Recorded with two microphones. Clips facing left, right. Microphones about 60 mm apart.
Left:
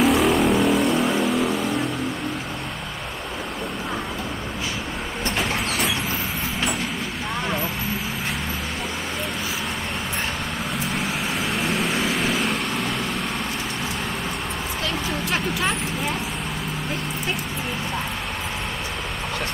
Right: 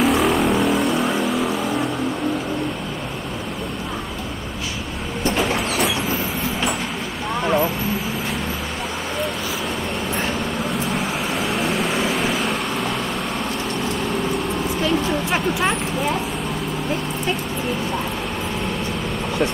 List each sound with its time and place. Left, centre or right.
0.0 s vehicle: centre
5.5 s train: centre
7.4 s vehicle: centre
10.7 s vehicle: centre
15.2 s vehicle: centre